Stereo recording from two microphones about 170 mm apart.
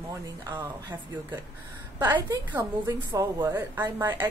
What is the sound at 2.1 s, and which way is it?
A woman's voice, 20° right (ahead or behind).